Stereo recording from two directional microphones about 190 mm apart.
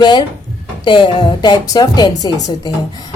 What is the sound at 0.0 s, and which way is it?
A woman's voice, 25° left (ahead or behind).